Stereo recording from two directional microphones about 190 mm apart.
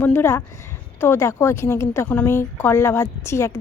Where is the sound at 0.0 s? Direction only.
10° left (ahead or behind).